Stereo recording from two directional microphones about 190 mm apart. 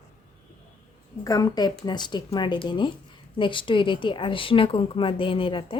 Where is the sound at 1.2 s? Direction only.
20° left (ahead or behind).